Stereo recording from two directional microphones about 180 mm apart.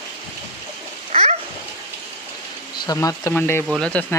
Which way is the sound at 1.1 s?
35° right (ahead or behind).